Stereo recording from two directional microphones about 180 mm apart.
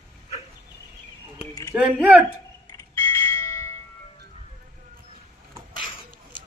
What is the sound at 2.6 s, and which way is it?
Bell, 15° left (ahead or behind).